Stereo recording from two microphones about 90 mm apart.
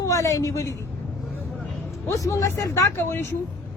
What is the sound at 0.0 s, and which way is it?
Speech, 35° left (ahead or behind).